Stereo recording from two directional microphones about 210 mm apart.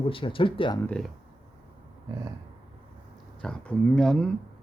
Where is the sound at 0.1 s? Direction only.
25° left (ahead or behind).